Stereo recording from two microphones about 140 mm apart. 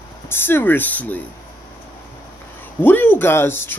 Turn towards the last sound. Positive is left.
turn(degrees=15)  # may be behind; listen again after turning